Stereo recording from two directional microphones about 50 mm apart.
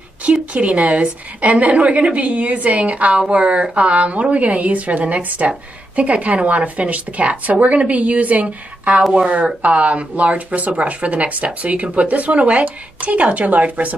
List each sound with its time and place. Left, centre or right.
0.2 s a woman's voice: right